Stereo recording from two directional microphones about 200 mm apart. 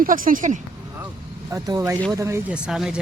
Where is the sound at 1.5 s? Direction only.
15° right (ahead or behind).